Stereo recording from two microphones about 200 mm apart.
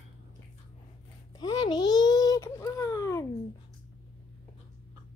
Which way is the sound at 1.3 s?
20° left (ahead or behind).